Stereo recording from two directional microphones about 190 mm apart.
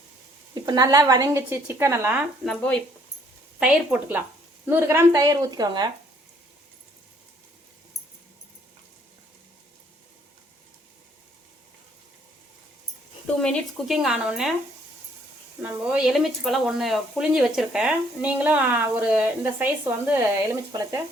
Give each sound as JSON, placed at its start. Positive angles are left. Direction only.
{"t": 0.6, "sound": "a woman's voice", "side_deg": -20}
{"t": 2.5, "sound": "a woman's voice", "side_deg": 5}
{"t": 13.2, "sound": "speech", "side_deg": 5}
{"t": 15.6, "sound": "speech", "side_deg": -5}